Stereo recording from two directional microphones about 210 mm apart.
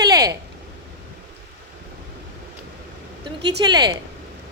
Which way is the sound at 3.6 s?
20° right (ahead or behind).